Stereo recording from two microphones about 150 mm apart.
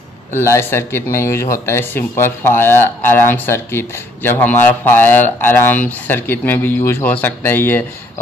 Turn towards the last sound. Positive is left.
turn(degrees=15)  # may be behind; listen again after turning